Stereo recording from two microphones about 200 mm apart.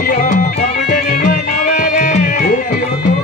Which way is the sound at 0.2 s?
40° left (ahead or behind).